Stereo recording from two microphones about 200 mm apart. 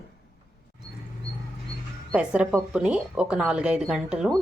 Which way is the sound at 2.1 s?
5° right (ahead or behind).